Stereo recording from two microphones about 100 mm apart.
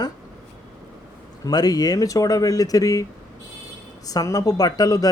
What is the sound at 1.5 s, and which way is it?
Speech, 40° left (ahead or behind).